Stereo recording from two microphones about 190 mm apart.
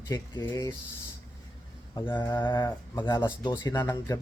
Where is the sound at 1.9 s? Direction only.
25° left (ahead or behind).